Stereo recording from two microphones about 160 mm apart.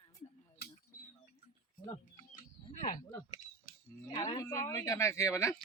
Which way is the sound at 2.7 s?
55° left (ahead or behind).